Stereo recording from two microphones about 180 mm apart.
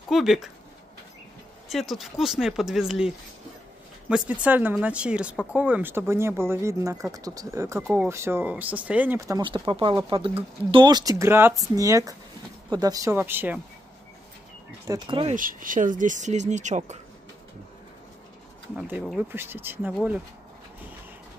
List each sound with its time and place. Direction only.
0.1 s speech: centre (ahead or behind)
1.7 s speech: centre (ahead or behind)
4.1 s speech: 10° right (ahead or behind)
14.9 s speech: 25° right (ahead or behind)
15.3 s speech: 50° right (ahead or behind)
18.8 s speech: 5° right (ahead or behind)